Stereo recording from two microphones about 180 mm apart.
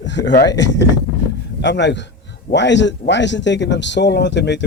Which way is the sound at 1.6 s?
75° left (ahead or behind).